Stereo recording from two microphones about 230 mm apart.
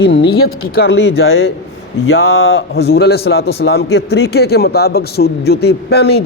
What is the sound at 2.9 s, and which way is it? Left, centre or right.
Speech, left.